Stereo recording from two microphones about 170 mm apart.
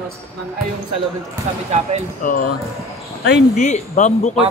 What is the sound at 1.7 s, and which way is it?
Speech, 40° right (ahead or behind).